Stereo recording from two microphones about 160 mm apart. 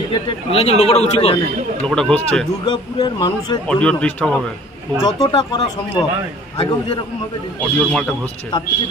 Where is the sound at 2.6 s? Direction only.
25° left (ahead or behind).